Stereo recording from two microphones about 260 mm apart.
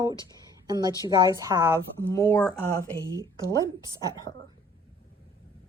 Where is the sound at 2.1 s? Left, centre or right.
Centre.